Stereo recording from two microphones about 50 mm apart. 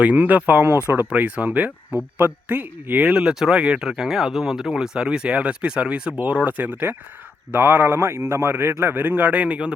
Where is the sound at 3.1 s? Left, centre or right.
Centre.